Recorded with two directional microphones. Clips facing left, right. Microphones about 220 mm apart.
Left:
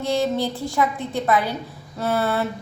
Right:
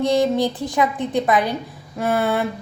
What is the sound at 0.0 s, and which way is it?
A woman's voice, 15° right (ahead or behind).